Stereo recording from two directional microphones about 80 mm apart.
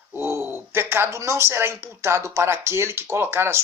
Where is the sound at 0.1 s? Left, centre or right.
Right.